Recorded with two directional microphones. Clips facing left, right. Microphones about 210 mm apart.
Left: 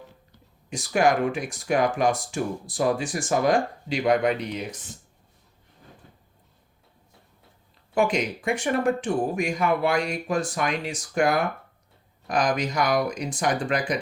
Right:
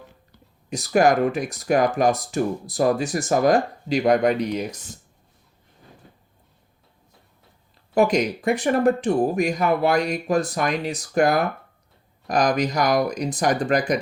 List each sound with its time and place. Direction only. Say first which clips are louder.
0.7 s speech: right 4 dB; 40° right (ahead or behind)
7.9 s speech: right 4 dB; 40° right (ahead or behind)